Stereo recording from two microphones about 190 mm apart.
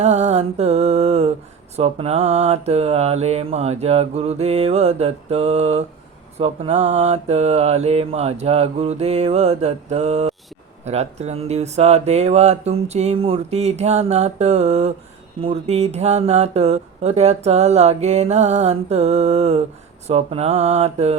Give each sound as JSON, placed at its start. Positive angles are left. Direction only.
{"t": 0.0, "sound": "speech", "side_deg": -35}